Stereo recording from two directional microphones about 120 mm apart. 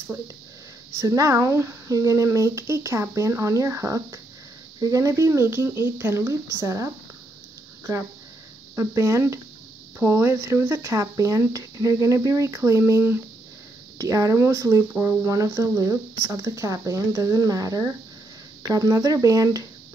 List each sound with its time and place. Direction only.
0.9 s speech: 30° right (ahead or behind)
8.7 s speech: 25° right (ahead or behind)